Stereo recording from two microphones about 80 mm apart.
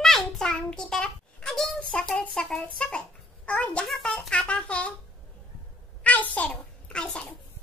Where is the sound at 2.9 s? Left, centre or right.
Centre.